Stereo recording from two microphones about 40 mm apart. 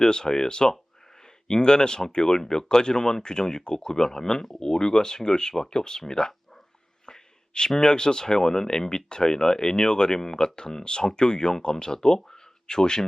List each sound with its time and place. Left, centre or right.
0.0 s speech: centre
7.0 s sneeze: centre
7.8 s speech: centre